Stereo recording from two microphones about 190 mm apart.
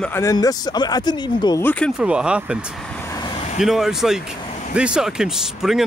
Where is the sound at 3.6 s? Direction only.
Centre (ahead or behind).